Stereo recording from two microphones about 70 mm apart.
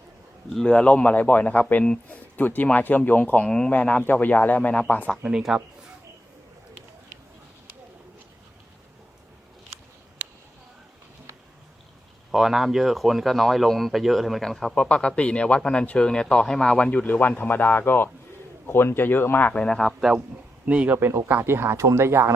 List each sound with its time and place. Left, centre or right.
0.5 s speech: centre
5.2 s speech: centre
10.2 s a sound: right
12.3 s speech: centre
14.8 s a man's voice: centre
19.6 s a man's voice: centre
20.0 s speech: centre
20.7 s speech: right